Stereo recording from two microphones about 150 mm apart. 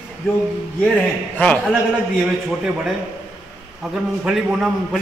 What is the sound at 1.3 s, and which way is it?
Speech, 10° left (ahead or behind).